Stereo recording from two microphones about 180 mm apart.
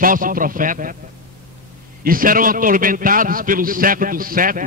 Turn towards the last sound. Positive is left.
turn(degrees=-50)  # may be behind; listen again after turning